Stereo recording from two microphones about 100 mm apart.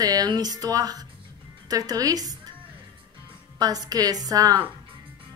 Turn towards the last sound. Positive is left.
turn(degrees=-40)  # may be behind; listen again after turning